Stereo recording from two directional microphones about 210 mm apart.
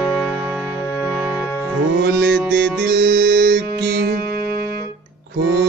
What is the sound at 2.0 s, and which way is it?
Music, 50° right (ahead or behind).